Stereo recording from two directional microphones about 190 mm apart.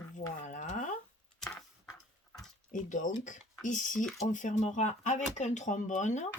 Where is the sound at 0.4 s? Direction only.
40° left (ahead or behind).